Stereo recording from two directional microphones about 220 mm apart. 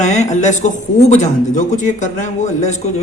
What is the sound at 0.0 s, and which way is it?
A man's voice, 35° left (ahead or behind).